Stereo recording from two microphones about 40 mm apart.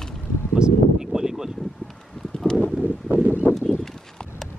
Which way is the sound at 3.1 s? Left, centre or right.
Right.